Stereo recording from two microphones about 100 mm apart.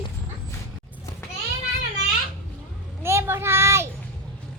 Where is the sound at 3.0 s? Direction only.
25° right (ahead or behind).